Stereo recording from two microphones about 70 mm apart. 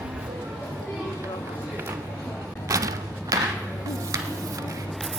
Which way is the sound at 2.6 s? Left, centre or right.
Right.